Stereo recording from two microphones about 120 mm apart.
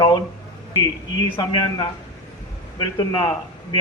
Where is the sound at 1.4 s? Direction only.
30° left (ahead or behind).